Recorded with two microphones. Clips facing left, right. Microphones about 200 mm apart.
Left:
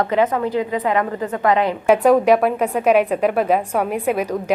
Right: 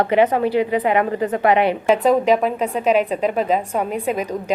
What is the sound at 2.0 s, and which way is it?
A woman's voice, 10° left (ahead or behind).